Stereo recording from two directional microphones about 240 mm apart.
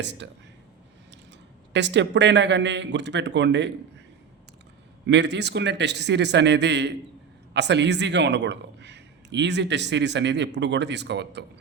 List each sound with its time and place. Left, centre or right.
0.0 s a man's voice: right
1.7 s a man's voice: right
5.0 s a man's voice: right